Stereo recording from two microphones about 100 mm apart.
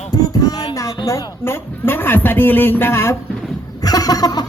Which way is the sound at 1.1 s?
25° left (ahead or behind).